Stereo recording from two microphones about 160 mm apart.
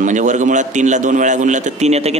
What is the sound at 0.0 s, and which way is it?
A man's voice, 50° right (ahead or behind).